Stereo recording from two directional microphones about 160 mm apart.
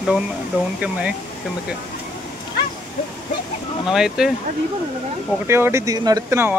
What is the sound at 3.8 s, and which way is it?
Speech, 5° right (ahead or behind).